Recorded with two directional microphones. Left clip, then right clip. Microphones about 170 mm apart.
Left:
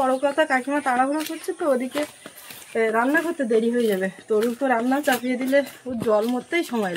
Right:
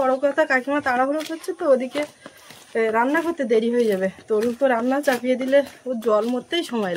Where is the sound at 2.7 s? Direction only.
15° right (ahead or behind).